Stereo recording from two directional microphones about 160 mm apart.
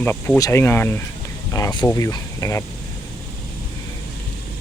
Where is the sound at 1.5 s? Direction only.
25° left (ahead or behind).